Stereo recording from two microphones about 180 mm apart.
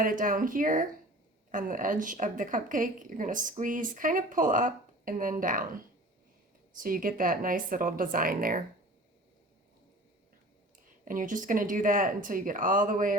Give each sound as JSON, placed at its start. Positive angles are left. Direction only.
{"t": 0.0, "sound": "a woman's voice", "side_deg": -50}
{"t": 11.0, "sound": "a woman's voice", "side_deg": -45}